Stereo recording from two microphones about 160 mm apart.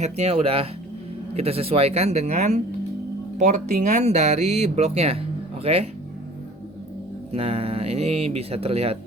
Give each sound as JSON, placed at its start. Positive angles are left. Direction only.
{"t": 0.0, "sound": "speech", "side_deg": -40}
{"t": 7.3, "sound": "speech", "side_deg": -40}